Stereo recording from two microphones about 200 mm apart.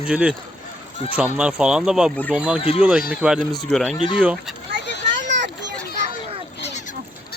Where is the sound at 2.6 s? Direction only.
30° left (ahead or behind).